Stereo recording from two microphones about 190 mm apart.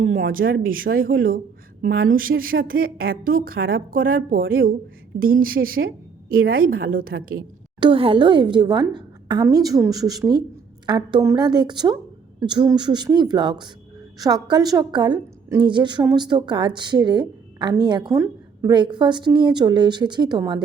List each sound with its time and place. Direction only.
0.0 s a woman's voice: 45° right (ahead or behind)
7.8 s a woman's voice: 25° right (ahead or behind)